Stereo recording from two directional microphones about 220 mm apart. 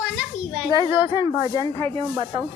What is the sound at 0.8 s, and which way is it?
Speech, 20° left (ahead or behind).